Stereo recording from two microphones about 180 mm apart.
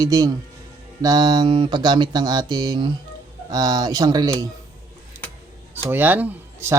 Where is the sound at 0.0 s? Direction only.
20° right (ahead or behind).